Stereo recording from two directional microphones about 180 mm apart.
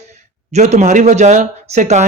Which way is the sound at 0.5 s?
40° right (ahead or behind).